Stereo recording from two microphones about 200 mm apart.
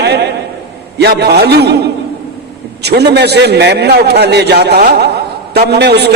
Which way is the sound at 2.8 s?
55° right (ahead or behind).